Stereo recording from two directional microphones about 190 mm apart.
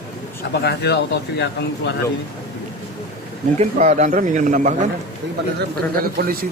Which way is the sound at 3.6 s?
40° right (ahead or behind).